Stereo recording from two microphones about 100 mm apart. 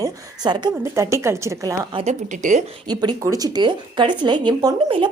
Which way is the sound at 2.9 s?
45° right (ahead or behind).